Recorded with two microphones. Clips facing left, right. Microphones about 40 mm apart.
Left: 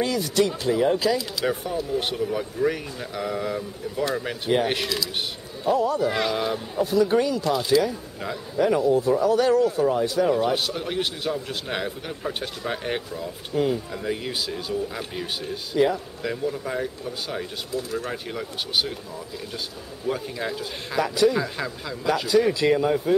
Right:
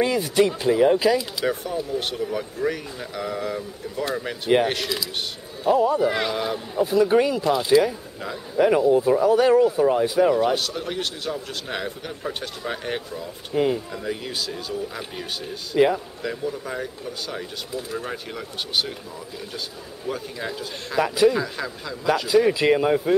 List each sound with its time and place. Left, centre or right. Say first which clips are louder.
0.0 s a man's voice: right 3 dB; centre
1.4 s a man's voice: right 1 dB; centre
10.5 s a man's voice: even; centre
13.5 s a man's voice: right 2 dB; centre
13.9 s speech: left 1 dB; centre
17.7 s a man's voice: left 2 dB; centre
18.1 s speech: left 1 dB; centre
20.1 s speech: left 2 dB; centre
21.0 s a man's voice: right 2 dB; centre
21.4 s a man's voice: even; centre